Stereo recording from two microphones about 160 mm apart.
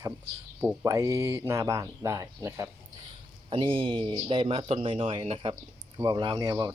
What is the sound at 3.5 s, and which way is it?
A man's voice, 30° right (ahead or behind).